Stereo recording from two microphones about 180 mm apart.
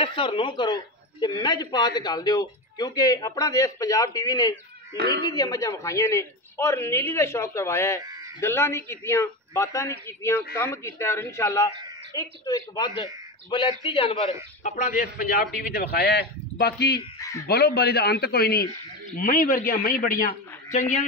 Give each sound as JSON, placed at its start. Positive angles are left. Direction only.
{"t": 0.0, "sound": "a man's voice", "side_deg": 30}
{"t": 8.0, "sound": "bleat", "side_deg": -20}
{"t": 8.4, "sound": "a man's voice", "side_deg": 15}
{"t": 14.6, "sound": "a man's voice", "side_deg": 40}
{"t": 17.2, "sound": "speech", "side_deg": 15}
{"t": 17.5, "sound": "a man's voice", "side_deg": 60}
{"t": 19.1, "sound": "a woman's voice", "side_deg": 50}